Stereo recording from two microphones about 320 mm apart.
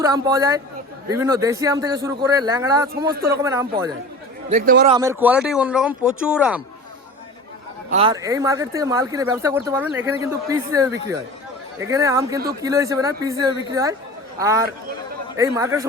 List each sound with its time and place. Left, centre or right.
0.0 s speech: centre
4.4 s a man's voice: right
4.9 s speech: centre
7.9 s speech: centre